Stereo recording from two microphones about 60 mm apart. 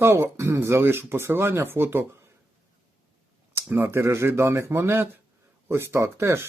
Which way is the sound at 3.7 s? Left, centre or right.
Right.